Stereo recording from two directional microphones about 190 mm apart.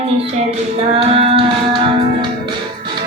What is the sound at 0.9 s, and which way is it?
Music, 30° right (ahead or behind).